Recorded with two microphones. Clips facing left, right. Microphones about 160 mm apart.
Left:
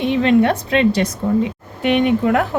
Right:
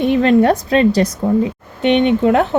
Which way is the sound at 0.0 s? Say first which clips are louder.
Right 2 dB; 45° right (ahead or behind).